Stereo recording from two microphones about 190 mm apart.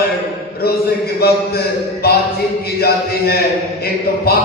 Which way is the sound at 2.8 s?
55° left (ahead or behind).